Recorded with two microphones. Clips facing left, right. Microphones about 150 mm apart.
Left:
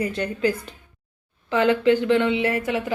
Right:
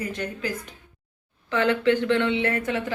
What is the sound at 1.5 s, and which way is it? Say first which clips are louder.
Speech: left 3 dB; 15° left (ahead or behind).